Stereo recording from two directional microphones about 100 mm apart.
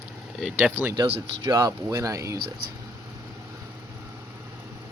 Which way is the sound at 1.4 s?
40° right (ahead or behind).